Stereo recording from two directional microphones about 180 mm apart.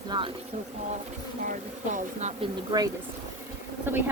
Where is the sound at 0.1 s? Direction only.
25° right (ahead or behind).